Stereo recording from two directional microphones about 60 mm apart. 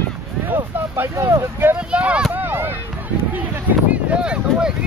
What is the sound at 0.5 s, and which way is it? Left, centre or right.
Vehicle, right.